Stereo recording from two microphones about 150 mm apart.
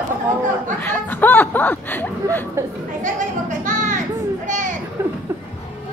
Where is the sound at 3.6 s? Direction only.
60° right (ahead or behind).